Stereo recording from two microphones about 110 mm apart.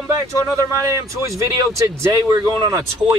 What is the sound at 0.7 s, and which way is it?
Speech, 25° right (ahead or behind).